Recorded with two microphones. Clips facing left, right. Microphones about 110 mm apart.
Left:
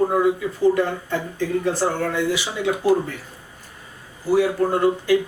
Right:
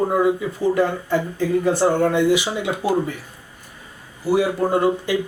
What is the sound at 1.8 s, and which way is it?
Speech, 20° right (ahead or behind).